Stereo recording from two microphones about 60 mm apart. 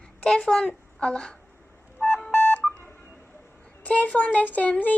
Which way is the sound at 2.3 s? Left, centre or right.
Left.